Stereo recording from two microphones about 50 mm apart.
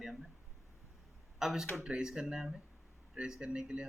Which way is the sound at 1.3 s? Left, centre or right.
Centre.